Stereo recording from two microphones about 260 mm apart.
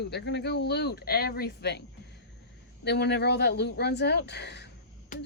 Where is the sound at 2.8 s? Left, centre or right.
Left.